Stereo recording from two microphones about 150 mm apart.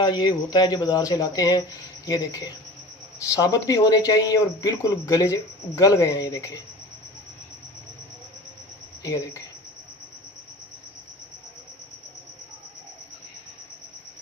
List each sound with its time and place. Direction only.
0.0 s speech: 30° left (ahead or behind)
9.0 s speech: 20° left (ahead or behind)